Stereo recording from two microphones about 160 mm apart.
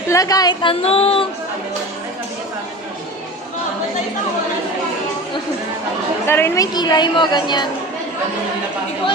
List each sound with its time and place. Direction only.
0.1 s a woman's voice: 20° left (ahead or behind); by 1.3 s 35° left (ahead or behind)
6.2 s a woman's voice: 15° left (ahead or behind)
6.7 s a woman's voice: 25° left (ahead or behind)